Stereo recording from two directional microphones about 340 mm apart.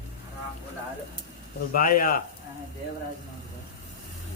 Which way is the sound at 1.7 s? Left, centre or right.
Left.